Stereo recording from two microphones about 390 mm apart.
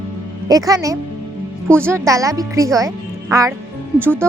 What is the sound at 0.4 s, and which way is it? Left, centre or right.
Speech, centre.